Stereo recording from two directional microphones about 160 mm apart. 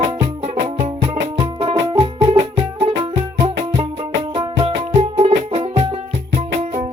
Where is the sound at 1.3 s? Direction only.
35° right (ahead or behind).